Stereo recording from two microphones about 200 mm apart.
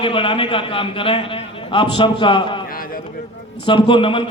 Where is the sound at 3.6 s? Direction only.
25° left (ahead or behind).